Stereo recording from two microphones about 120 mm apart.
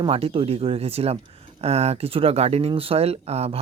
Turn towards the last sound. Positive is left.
turn(degrees=-60)  # may be behind; listen again after turning